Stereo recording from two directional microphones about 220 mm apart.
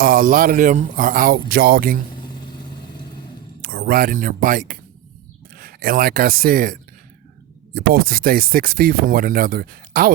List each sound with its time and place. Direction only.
0.0 s speech: 40° right (ahead or behind)
3.6 s speech: 45° right (ahead or behind)